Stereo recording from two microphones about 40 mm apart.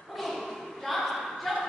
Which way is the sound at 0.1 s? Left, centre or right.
Centre.